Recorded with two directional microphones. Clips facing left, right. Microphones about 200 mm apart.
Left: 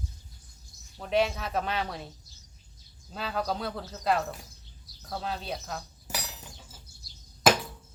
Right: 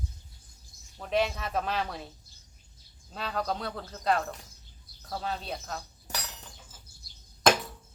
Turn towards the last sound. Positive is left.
turn(degrees=5)  # may be behind; listen again after turning